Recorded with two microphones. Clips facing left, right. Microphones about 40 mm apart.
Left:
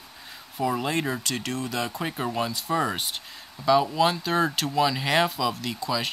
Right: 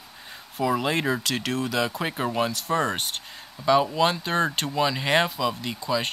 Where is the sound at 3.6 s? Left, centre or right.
Right.